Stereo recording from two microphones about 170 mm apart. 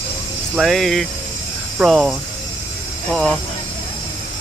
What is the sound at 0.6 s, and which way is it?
Speech, centre (ahead or behind).